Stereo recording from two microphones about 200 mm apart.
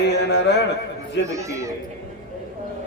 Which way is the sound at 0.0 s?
60° left (ahead or behind).